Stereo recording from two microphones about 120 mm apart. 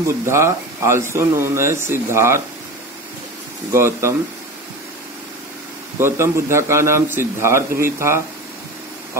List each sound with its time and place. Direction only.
0.0 s speech: 20° right (ahead or behind)
3.7 s speech: 20° right (ahead or behind)
5.9 s speech: 20° right (ahead or behind)